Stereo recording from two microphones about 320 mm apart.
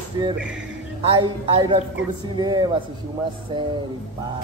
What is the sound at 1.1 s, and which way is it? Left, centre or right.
Speech, centre.